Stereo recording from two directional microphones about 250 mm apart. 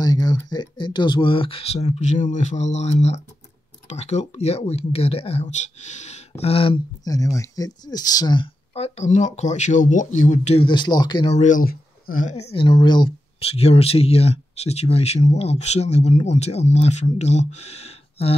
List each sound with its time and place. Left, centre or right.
0.0 s speech: centre